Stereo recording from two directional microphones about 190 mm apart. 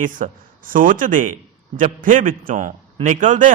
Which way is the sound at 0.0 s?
45° right (ahead or behind).